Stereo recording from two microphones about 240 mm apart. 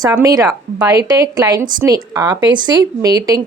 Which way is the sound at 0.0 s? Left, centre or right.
Centre.